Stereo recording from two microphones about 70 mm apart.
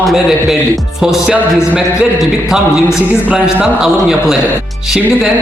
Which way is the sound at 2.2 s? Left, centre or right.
Centre.